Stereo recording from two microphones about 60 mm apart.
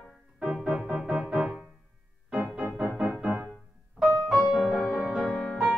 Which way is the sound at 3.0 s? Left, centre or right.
Right.